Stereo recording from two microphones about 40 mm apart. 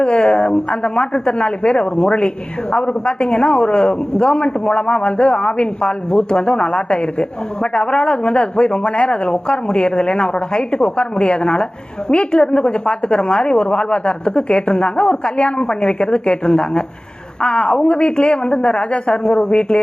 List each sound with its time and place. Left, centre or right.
0.0 s a man's voice: left